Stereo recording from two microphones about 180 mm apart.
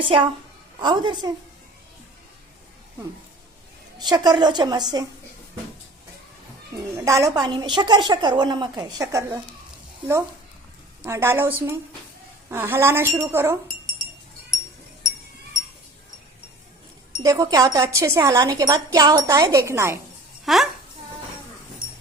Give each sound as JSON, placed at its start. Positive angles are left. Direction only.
{"t": 0.0, "sound": "a woman's voice", "side_deg": -30}
{"t": 3.9, "sound": "a woman's voice", "side_deg": -20}
{"t": 6.7, "sound": "a woman's voice", "side_deg": -15}
{"t": 11.0, "sound": "speech", "side_deg": -15}
{"t": 17.2, "sound": "a woman's voice", "side_deg": -20}
{"t": 20.4, "sound": "speech", "side_deg": 0}